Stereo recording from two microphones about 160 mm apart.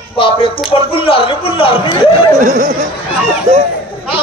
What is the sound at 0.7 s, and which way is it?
A man's voice, 35° left (ahead or behind).